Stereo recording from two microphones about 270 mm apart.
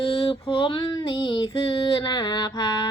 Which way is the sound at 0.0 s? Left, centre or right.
Left.